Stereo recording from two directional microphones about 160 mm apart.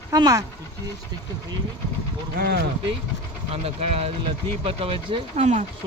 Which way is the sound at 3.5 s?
40° right (ahead or behind).